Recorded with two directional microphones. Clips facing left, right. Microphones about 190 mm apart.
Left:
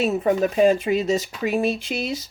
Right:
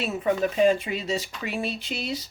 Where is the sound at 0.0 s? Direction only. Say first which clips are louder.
Left 5 dB; 40° left (ahead or behind).